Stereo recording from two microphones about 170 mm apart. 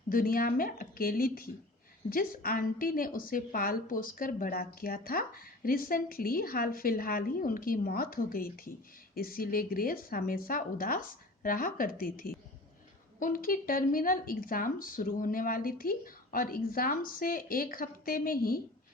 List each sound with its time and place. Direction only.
0.1 s a woman's voice: 55° left (ahead or behind)